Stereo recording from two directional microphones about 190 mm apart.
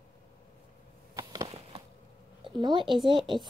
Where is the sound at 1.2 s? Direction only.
20° right (ahead or behind).